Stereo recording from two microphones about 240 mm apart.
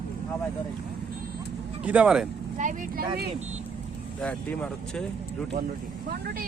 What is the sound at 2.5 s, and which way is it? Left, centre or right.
Speech, right.